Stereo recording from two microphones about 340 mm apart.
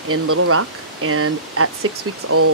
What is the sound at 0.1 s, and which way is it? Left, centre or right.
Speech, right.